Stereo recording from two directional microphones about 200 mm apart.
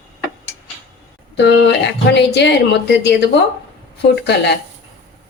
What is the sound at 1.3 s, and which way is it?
Speech, 60° left (ahead or behind).